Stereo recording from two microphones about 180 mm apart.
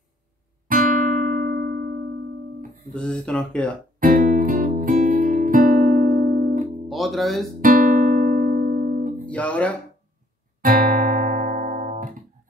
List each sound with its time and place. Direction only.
0.7 s music: 50° right (ahead or behind)
2.8 s speech: 5° left (ahead or behind)
4.0 s music: 50° right (ahead or behind)
6.9 s speech: centre (ahead or behind)
7.6 s music: 50° right (ahead or behind)
9.2 s speech: 5° left (ahead or behind)
10.6 s music: 50° right (ahead or behind)